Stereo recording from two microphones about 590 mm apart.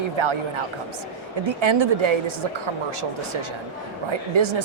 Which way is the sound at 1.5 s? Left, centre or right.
Right.